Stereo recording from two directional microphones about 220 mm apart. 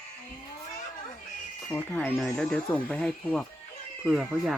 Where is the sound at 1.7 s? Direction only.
5° left (ahead or behind).